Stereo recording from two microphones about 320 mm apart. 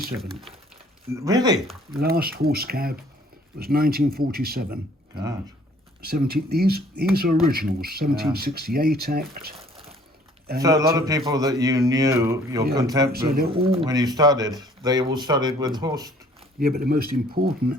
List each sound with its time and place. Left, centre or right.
0.2 s speech: centre
1.1 s speech: centre
2.0 s speech: right
6.0 s speech: right
10.6 s speech: centre
13.1 s speech: right
13.5 s speech: centre
16.6 s speech: right